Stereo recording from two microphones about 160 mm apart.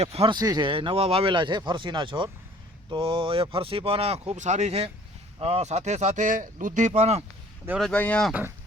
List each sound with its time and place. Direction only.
0.0 s speech: 40° right (ahead or behind)
0.3 s speech: 25° right (ahead or behind); by 7.3 s 40° right (ahead or behind)
7.8 s speech: 5° left (ahead or behind)
8.3 s speech: 10° right (ahead or behind)